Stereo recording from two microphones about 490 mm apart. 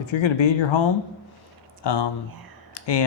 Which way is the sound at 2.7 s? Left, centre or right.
Left.